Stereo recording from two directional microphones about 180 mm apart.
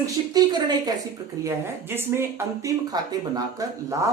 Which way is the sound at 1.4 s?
10° right (ahead or behind).